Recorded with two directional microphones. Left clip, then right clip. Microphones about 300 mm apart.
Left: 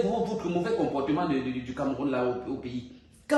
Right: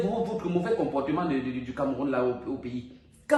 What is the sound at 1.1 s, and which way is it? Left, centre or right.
Speech, centre.